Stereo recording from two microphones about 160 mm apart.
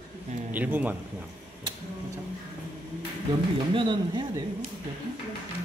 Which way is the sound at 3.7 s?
30° right (ahead or behind).